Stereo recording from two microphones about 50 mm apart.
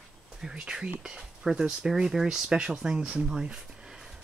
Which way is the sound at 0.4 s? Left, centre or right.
Centre.